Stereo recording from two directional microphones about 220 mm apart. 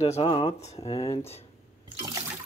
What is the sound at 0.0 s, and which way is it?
Speech, 25° left (ahead or behind).